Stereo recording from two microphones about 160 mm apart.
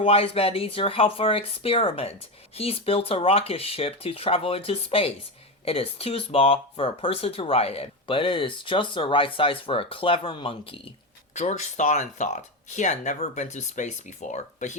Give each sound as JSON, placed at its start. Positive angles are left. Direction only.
{"t": 0.0, "sound": "speech", "side_deg": 35}
{"t": 11.3, "sound": "speech", "side_deg": 50}